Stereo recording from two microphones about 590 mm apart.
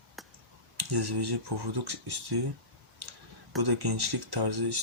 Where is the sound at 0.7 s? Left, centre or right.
Right.